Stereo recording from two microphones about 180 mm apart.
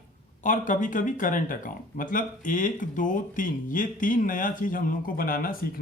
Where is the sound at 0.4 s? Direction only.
45° left (ahead or behind).